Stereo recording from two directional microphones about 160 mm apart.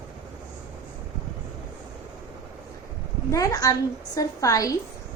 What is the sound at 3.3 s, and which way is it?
A woman's voice, 20° left (ahead or behind).